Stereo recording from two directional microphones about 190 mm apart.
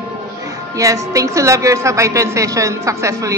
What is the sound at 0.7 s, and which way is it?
A woman's voice, 15° right (ahead or behind).